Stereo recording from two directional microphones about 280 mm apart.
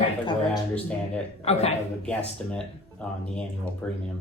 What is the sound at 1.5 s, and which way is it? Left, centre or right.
Speech, left.